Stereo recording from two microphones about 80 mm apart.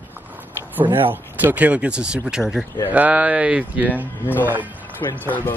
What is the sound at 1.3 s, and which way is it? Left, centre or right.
Speech, centre.